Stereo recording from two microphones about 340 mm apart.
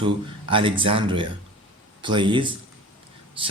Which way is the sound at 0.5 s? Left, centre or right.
Centre.